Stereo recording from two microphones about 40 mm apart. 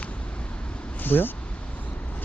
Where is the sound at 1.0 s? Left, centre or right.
Left.